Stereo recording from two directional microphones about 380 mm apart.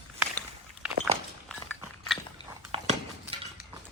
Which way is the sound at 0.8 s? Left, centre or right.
Centre.